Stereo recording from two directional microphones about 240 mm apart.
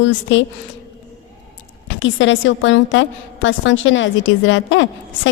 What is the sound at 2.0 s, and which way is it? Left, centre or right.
A woman's voice, left.